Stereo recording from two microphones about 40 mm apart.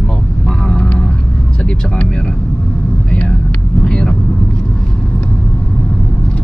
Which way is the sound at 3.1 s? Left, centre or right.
Left.